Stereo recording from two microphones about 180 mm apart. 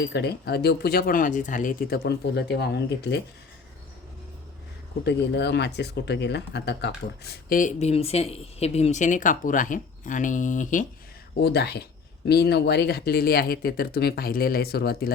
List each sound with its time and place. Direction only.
0.0 s speech: 65° left (ahead or behind); by 2.0 s 45° left (ahead or behind)
2.0 s speech: 70° left (ahead or behind)
5.0 s speech: 70° left (ahead or behind)
7.5 s speech: 40° left (ahead or behind)
11.3 s speech: 65° left (ahead or behind)